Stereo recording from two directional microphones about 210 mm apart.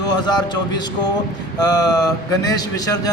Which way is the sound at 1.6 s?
15° left (ahead or behind).